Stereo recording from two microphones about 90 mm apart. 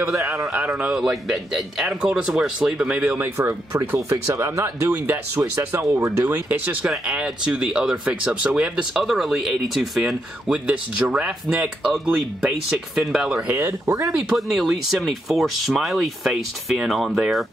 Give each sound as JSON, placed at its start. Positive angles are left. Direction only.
{"t": 0.1, "sound": "speech", "side_deg": -30}
{"t": 0.5, "sound": "a man's voice", "side_deg": -15}
{"t": 3.1, "sound": "a man's voice", "side_deg": -30}
{"t": 10.7, "sound": "a man's voice", "side_deg": -15}
{"t": 13.6, "sound": "speech", "side_deg": -30}
{"t": 14.3, "sound": "speech", "side_deg": -5}